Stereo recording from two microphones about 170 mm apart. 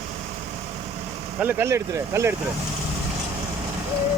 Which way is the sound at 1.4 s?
15° right (ahead or behind).